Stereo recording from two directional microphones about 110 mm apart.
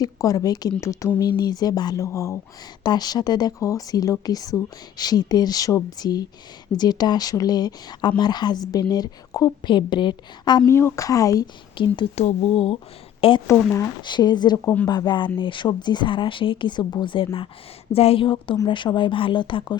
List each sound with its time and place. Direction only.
0.0 s speech: 30° left (ahead or behind)
1.2 s speech: 40° left (ahead or behind)
2.8 s speech: 40° left (ahead or behind)
9.6 s speech: 45° left (ahead or behind)
10.7 s speech: 25° left (ahead or behind)
11.8 s speech: 50° left (ahead or behind)
12.1 s speech: 70° left (ahead or behind)
13.5 s speech: 25° left (ahead or behind)
14.0 s speech: 40° left (ahead or behind)
17.9 s a woman's voice: 60° left (ahead or behind); by 19.7 s 45° left (ahead or behind)